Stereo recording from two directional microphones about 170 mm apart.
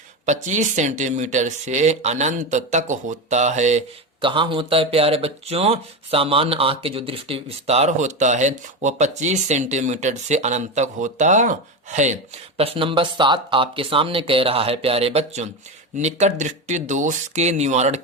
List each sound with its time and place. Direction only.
0.3 s speech: 45° right (ahead or behind)
4.3 s speech: 30° right (ahead or behind)